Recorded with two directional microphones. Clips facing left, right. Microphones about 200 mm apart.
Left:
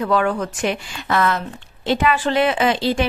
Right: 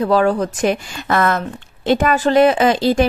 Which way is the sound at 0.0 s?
35° right (ahead or behind).